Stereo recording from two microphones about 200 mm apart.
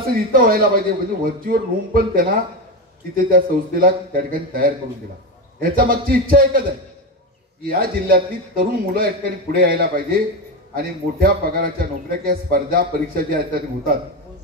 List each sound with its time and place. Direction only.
0.1 s a man's voice: 45° right (ahead or behind)
7.6 s a man's voice: 45° right (ahead or behind)